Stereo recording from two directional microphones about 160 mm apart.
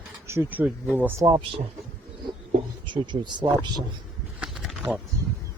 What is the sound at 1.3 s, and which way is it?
Speech, 30° right (ahead or behind).